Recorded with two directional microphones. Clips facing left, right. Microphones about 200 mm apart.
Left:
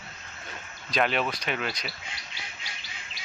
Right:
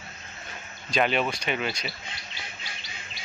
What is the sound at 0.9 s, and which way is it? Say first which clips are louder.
Speech: right 2 dB; centre (ahead or behind).